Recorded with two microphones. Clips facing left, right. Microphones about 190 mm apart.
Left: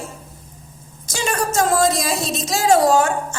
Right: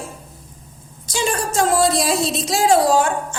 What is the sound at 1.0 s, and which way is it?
A woman's voice, 45° left (ahead or behind).